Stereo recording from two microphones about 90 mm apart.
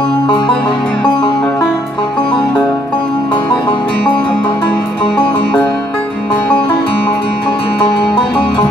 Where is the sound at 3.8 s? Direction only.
15° left (ahead or behind).